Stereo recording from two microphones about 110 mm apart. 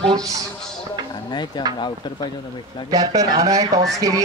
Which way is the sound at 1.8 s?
45° left (ahead or behind).